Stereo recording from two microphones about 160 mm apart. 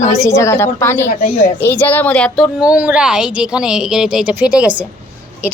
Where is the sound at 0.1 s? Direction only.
20° left (ahead or behind).